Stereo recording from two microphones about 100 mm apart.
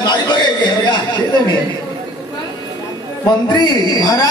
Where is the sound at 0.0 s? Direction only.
45° left (ahead or behind).